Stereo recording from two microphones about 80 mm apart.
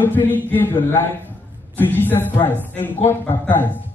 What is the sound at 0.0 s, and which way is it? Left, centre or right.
A woman's voice, left.